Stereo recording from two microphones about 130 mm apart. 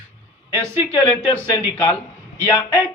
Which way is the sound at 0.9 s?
35° left (ahead or behind).